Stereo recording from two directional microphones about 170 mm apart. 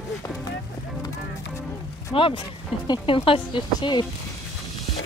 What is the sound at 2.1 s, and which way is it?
Speech, 30° left (ahead or behind).